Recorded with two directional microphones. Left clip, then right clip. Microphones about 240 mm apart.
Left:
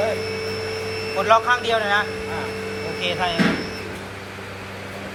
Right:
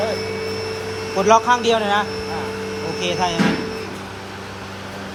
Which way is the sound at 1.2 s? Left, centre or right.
Right.